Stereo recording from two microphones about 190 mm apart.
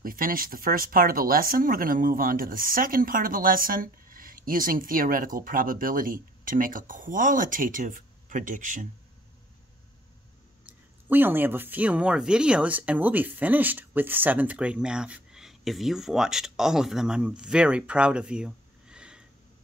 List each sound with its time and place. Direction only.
0.0 s speech: 50° right (ahead or behind)
10.6 s speech: 10° right (ahead or behind)